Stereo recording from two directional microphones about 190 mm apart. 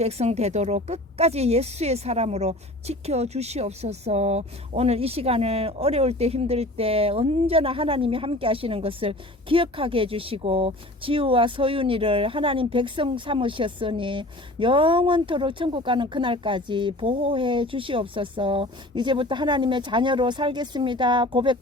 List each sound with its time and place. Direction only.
0.0 s speech: 35° right (ahead or behind)